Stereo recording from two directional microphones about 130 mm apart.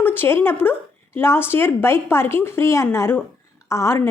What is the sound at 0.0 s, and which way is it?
A woman's voice, 15° left (ahead or behind).